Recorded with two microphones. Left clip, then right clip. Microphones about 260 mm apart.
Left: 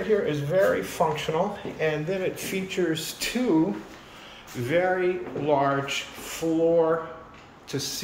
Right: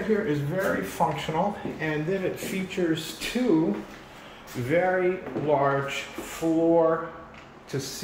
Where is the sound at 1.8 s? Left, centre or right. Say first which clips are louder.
Left 2 dB; centre.